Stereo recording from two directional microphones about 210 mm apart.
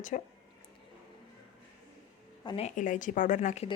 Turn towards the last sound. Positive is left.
turn(degrees=35)  # may be behind; listen again after turning